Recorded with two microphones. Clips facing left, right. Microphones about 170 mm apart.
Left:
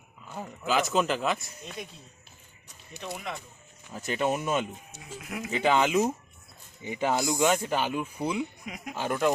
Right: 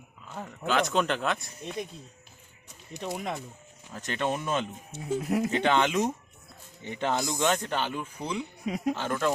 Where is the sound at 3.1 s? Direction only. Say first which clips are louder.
Right 3 dB; 40° right (ahead or behind).